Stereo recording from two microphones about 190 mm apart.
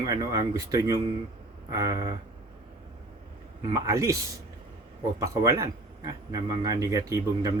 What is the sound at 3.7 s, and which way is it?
Speech, 15° right (ahead or behind).